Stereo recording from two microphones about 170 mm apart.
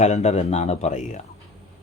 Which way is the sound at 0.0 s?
40° left (ahead or behind).